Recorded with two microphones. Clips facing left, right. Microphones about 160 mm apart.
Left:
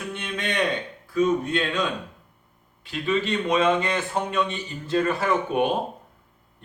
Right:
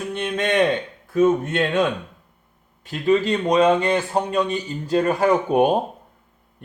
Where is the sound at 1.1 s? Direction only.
50° right (ahead or behind).